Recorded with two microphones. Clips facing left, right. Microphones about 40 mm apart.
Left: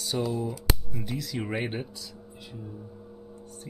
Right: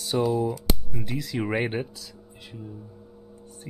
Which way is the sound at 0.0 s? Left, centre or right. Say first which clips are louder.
Right 5 dB; centre.